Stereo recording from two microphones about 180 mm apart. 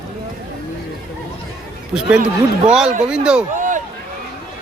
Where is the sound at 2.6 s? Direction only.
5° right (ahead or behind).